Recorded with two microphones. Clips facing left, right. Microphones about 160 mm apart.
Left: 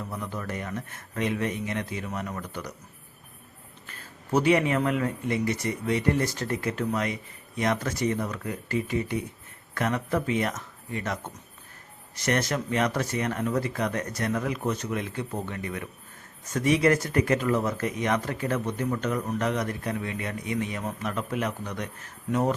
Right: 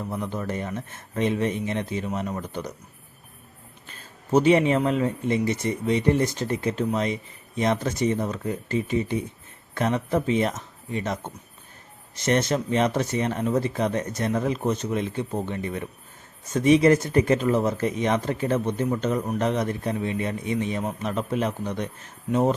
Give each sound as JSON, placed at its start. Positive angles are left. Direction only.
{"t": 0.1, "sound": "speech", "side_deg": -25}
{"t": 3.8, "sound": "speech", "side_deg": -20}